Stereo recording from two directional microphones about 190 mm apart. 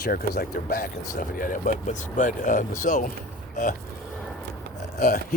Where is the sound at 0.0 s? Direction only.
50° left (ahead or behind).